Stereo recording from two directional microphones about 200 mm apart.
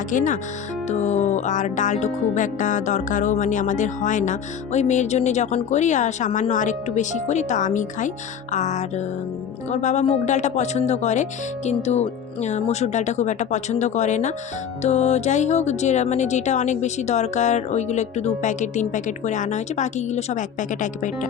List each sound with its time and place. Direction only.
0.1 s music: 40° left (ahead or behind)